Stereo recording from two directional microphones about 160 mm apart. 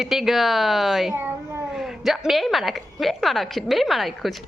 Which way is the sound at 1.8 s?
Centre (ahead or behind).